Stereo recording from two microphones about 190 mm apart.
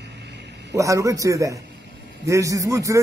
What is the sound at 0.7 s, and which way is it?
Speech, 15° right (ahead or behind).